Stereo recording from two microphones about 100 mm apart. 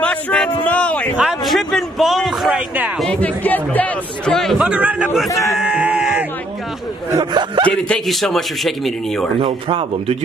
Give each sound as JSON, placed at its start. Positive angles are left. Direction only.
{"t": 0.0, "sound": "a sound", "side_deg": 10}
{"t": 1.1, "sound": "a man's voice", "side_deg": -5}
{"t": 3.1, "sound": "a man's voice", "side_deg": 15}
{"t": 4.4, "sound": "a man's voice", "side_deg": 0}
{"t": 4.6, "sound": "a man's voice", "side_deg": -15}
{"t": 5.3, "sound": "speech", "side_deg": 30}
{"t": 5.6, "sound": "a sound", "side_deg": -10}
{"t": 7.3, "sound": "speech", "side_deg": -55}
{"t": 7.7, "sound": "a man's voice", "side_deg": 5}
{"t": 9.4, "sound": "speech", "side_deg": -55}